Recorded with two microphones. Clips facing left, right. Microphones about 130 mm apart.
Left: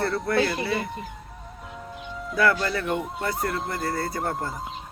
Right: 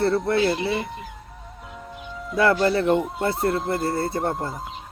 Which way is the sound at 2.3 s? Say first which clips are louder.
Right 4 dB; 25° right (ahead or behind).